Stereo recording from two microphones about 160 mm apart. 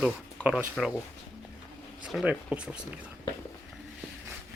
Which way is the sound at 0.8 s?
Centre (ahead or behind).